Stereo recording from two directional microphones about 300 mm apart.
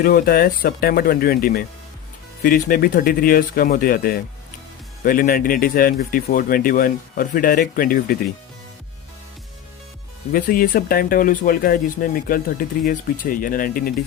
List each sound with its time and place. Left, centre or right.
0.0 s speech: left
10.3 s speech: left